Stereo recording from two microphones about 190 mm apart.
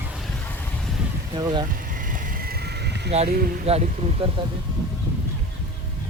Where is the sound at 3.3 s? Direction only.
50° right (ahead or behind).